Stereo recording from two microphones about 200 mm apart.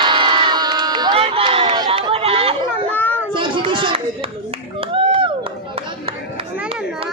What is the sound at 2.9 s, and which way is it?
Children playing, 10° left (ahead or behind).